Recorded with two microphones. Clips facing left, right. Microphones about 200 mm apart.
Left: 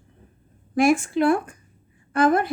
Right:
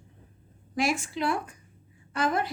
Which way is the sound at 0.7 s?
55° left (ahead or behind).